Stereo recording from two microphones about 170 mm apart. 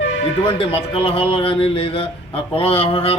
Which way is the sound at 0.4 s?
35° left (ahead or behind).